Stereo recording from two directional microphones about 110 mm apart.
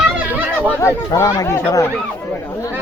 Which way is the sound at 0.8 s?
25° left (ahead or behind).